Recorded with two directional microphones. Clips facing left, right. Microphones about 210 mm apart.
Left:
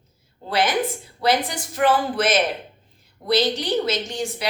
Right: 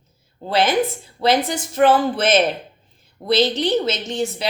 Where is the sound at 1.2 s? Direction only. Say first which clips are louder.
Right 3 dB; 25° right (ahead or behind).